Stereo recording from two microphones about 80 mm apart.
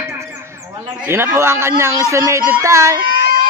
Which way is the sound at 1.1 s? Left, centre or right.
Right.